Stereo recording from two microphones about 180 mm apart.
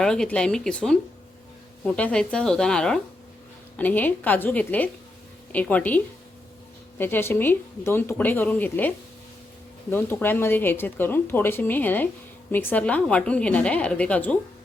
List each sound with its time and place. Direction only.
0.0 s speech: 5° left (ahead or behind)
7.0 s speech: 10° left (ahead or behind)
9.9 s speech: 10° left (ahead or behind)